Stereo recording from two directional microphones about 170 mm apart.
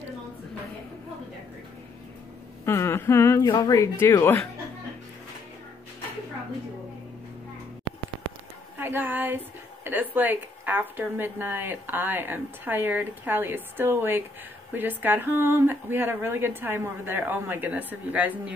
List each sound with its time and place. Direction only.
2.6 s humming: 15° left (ahead or behind)
3.4 s speech: 25° left (ahead or behind)
4.0 s humming: 15° left (ahead or behind)
8.7 s a woman's voice: 10° right (ahead or behind)